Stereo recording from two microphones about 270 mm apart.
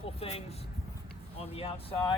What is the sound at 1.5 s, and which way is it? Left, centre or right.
Speech, centre.